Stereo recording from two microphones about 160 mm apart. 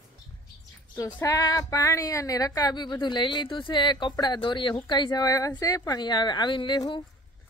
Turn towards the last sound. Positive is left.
turn(degrees=30)  # may be behind; listen again after turning